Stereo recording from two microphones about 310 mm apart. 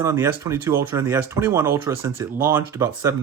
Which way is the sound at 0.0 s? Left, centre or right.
Centre.